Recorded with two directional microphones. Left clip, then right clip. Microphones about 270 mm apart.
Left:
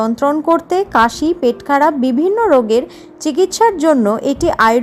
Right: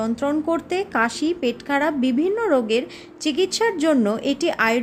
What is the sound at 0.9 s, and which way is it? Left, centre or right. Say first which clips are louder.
Speech: left 9 dB; centre.